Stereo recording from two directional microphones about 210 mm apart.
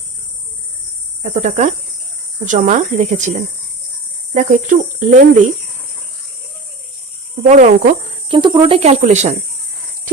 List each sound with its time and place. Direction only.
1.2 s speech: 35° right (ahead or behind)
4.4 s speech: 35° right (ahead or behind)
7.4 s speech: 40° right (ahead or behind)
8.3 s speech: 20° right (ahead or behind)